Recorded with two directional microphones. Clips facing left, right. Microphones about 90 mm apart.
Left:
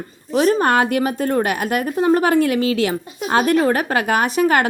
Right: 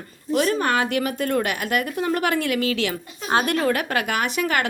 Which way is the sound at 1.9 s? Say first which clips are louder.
Left 7 dB; 30° left (ahead or behind).